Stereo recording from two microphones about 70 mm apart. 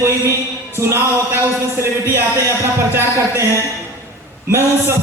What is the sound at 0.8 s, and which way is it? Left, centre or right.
Speech, right.